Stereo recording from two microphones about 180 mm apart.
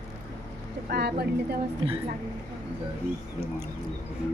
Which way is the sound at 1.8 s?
30° right (ahead or behind).